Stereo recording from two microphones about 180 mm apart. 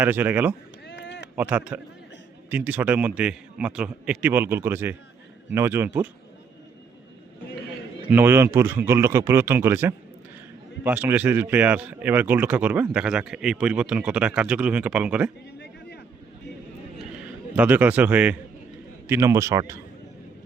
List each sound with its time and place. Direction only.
0.0 s a man's voice: 10° right (ahead or behind)
0.9 s a sound: 75° left (ahead or behind)
1.4 s a man's voice: 10° right (ahead or behind)
8.1 s a man's voice: 10° right (ahead or behind)
15.5 s a sound: 70° left (ahead or behind)
17.5 s a man's voice: 10° right (ahead or behind)